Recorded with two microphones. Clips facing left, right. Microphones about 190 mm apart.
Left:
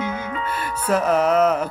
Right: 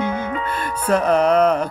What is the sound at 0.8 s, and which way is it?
Music, 5° left (ahead or behind).